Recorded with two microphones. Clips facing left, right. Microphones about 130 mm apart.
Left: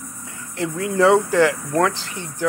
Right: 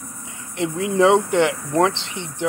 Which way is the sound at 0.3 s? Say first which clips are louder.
Right 1 dB; 20° right (ahead or behind).